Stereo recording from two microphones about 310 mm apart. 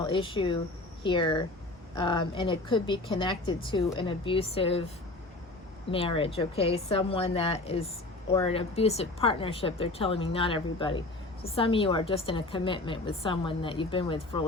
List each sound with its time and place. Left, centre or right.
0.0 s a woman's voice: centre
5.9 s a woman's voice: centre